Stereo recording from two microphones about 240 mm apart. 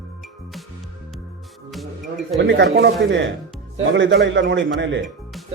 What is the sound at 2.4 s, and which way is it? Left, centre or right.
A man's voice, right.